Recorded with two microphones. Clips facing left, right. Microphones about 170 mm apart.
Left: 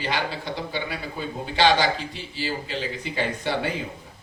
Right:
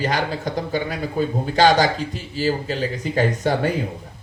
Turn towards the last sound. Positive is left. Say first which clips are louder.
# right 6 dB
turn(degrees=-45)  # may be behind; listen again after turning